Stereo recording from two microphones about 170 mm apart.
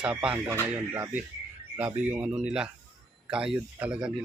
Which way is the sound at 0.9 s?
20° right (ahead or behind).